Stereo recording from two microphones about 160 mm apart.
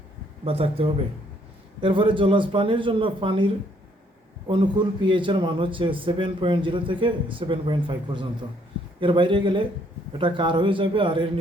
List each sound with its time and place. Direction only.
0.4 s a man's voice: 35° right (ahead or behind)